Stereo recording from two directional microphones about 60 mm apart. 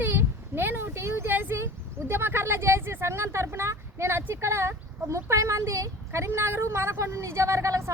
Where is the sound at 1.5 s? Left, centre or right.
Right.